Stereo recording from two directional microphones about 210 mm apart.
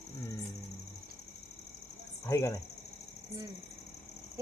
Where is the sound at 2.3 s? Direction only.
15° left (ahead or behind).